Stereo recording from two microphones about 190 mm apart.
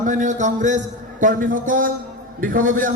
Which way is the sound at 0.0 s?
40° right (ahead or behind).